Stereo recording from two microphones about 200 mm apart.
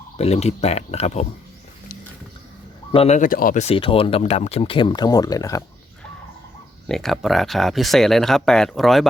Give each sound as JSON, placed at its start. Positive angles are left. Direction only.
{"t": 0.2, "sound": "speech", "side_deg": 30}
{"t": 2.9, "sound": "speech", "side_deg": 30}
{"t": 6.8, "sound": "speech", "side_deg": 0}